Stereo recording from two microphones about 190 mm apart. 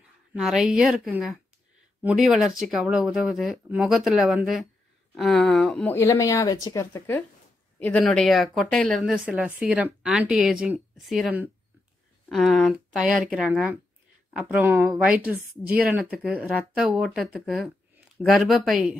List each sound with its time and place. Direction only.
0.3 s a woman's voice: centre (ahead or behind)
5.9 s a woman's voice: 15° left (ahead or behind); by 18.9 s centre (ahead or behind)